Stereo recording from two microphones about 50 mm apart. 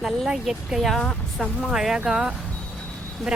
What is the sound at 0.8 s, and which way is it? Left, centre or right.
Speech, centre.